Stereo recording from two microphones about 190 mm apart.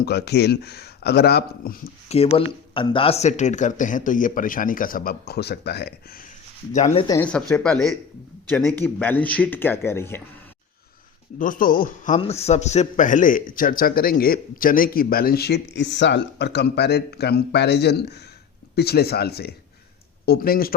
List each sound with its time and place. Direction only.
0.0 s speech: 60° left (ahead or behind)
2.0 s speech: 30° left (ahead or behind); by 5.9 s 60° left (ahead or behind)
6.7 s speech: 35° left (ahead or behind)
7.1 s speech: 10° left (ahead or behind)
11.3 s speech: 45° left (ahead or behind)
12.2 s speech: 35° left (ahead or behind); by 20.7 s 50° left (ahead or behind)